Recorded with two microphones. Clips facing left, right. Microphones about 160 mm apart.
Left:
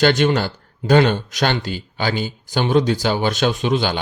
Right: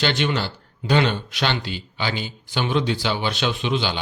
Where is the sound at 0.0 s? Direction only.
45° left (ahead or behind).